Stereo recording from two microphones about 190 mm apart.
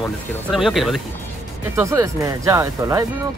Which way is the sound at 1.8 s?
15° right (ahead or behind).